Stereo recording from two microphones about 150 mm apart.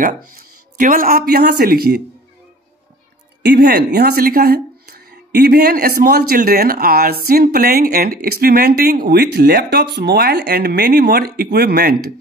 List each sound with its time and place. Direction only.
0.0 s speech: 65° right (ahead or behind); by 2.0 s 90° right
3.4 s speech: 90° right